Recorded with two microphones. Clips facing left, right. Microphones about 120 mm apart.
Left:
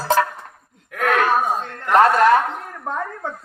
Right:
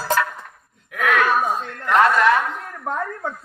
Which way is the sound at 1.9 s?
40° left (ahead or behind).